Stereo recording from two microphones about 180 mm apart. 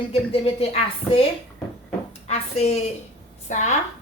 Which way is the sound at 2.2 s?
35° left (ahead or behind).